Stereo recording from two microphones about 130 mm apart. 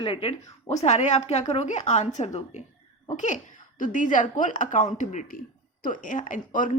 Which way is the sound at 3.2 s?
70° left (ahead or behind).